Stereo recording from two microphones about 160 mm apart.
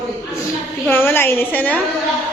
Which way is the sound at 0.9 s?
15° left (ahead or behind).